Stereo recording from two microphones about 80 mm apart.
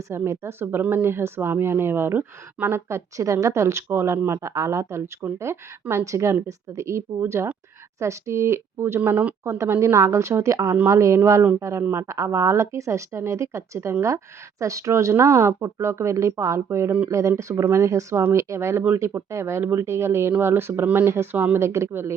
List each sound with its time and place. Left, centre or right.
0.1 s speech: right
9.0 s speech: centre
9.4 s speech: right